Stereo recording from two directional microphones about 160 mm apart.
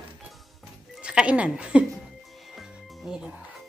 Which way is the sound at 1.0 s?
5° right (ahead or behind).